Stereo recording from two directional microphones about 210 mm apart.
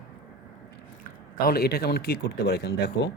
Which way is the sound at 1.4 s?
50° left (ahead or behind).